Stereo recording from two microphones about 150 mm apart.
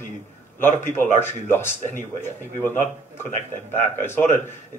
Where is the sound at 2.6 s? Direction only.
15° left (ahead or behind).